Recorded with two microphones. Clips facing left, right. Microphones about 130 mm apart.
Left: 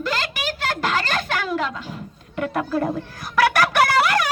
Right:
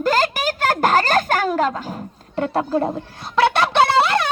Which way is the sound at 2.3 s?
30° right (ahead or behind).